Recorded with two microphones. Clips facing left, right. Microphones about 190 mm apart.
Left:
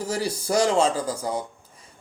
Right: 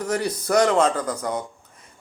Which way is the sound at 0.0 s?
30° left (ahead or behind).